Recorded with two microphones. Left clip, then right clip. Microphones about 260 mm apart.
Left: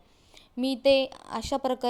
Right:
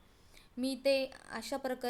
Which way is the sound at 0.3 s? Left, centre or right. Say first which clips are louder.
Left 8 dB; left.